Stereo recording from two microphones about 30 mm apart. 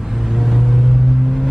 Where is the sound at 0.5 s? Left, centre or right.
Centre.